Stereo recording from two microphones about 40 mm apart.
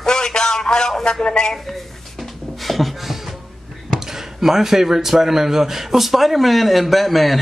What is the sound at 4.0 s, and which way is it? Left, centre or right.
Speech, centre.